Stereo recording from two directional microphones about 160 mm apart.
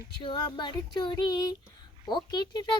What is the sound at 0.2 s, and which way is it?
A child's voice, 30° left (ahead or behind).